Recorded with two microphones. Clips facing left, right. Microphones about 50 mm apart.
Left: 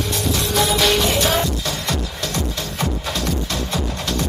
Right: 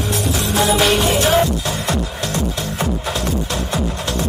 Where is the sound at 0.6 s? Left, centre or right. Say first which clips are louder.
Right 4 dB; right.